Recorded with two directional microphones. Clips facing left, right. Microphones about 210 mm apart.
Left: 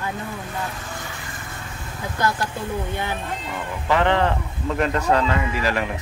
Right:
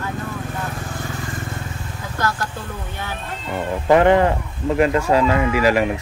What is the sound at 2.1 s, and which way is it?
Speech, 15° left (ahead or behind).